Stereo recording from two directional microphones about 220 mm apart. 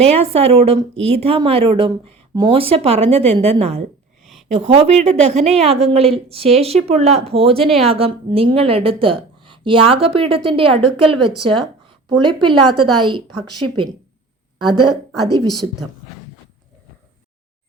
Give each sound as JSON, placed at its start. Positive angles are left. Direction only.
{"t": 0.0, "sound": "speech", "side_deg": -25}
{"t": 12.6, "sound": "a woman's voice", "side_deg": -90}
{"t": 14.6, "sound": "a woman's voice", "side_deg": -20}